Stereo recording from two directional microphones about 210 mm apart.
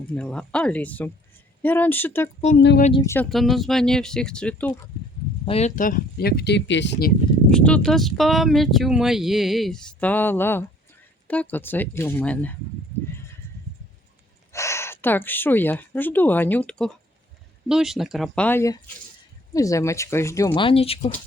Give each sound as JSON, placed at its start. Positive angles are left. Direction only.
{"t": 0.2, "sound": "speech", "side_deg": 5}
{"t": 2.6, "sound": "speech", "side_deg": 55}
{"t": 3.0, "sound": "speech", "side_deg": 10}
{"t": 3.2, "sound": "speech", "side_deg": 0}
{"t": 5.5, "sound": "speech", "side_deg": 30}
{"t": 7.5, "sound": "speech", "side_deg": 5}
{"t": 14.5, "sound": "speech", "side_deg": 15}